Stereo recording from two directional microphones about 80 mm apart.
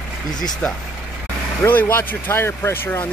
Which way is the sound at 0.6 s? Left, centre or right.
Centre.